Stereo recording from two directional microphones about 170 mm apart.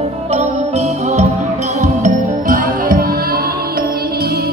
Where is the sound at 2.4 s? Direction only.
55° right (ahead or behind).